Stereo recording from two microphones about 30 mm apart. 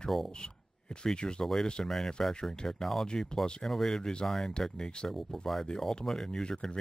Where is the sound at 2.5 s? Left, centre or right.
Left.